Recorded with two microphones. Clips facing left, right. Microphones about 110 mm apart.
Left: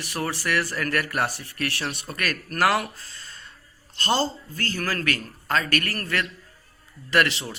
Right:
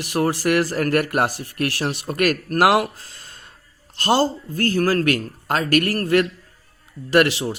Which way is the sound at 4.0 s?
50° right (ahead or behind).